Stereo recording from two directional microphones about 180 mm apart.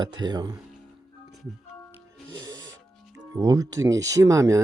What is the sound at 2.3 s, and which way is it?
Music, 20° right (ahead or behind).